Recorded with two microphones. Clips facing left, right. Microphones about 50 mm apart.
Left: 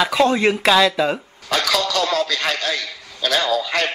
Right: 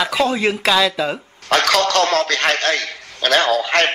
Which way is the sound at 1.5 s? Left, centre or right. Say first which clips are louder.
Right 4 dB; right.